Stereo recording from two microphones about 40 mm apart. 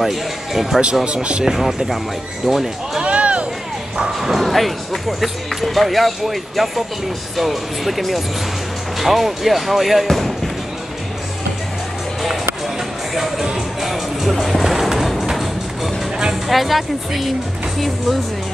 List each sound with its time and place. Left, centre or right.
0.0 s speech: centre
1.0 s speech: right
1.4 s speech: centre
3.0 s a sound: right
3.9 s speech: centre
10.0 s basketball bounce: centre
13.1 s music: centre
16.4 s speech: centre
17.7 s music: centre